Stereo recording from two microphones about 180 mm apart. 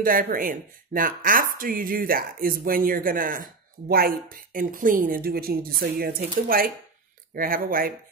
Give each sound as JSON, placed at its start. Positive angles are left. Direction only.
{"t": 0.0, "sound": "a woman's voice", "side_deg": -50}